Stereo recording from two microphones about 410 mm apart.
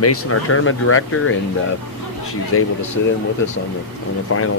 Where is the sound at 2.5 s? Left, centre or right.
Left.